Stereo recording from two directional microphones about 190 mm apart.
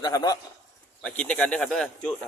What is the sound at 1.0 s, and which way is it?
A man's voice, 5° left (ahead or behind).